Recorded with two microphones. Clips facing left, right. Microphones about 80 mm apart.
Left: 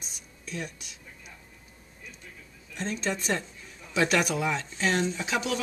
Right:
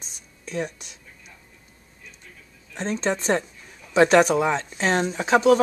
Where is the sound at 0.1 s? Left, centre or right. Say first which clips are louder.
Right 8 dB; right.